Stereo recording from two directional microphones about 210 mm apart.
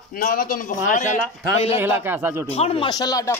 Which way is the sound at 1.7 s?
10° right (ahead or behind).